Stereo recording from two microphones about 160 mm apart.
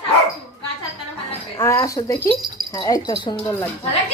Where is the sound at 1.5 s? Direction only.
20° left (ahead or behind).